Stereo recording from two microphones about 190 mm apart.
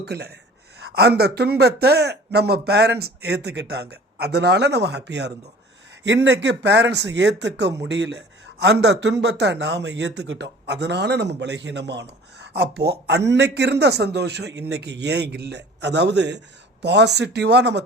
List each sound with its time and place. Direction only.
0.0 s a man's voice: 60° right (ahead or behind)